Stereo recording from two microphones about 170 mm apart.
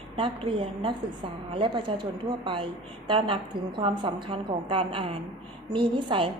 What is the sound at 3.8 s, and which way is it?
A woman's voice, 30° right (ahead or behind).